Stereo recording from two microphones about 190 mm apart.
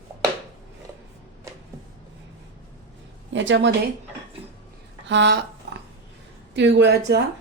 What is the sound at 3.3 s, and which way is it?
Speech, 70° right (ahead or behind).